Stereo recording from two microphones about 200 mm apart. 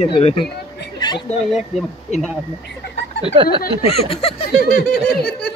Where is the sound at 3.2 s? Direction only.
30° right (ahead or behind).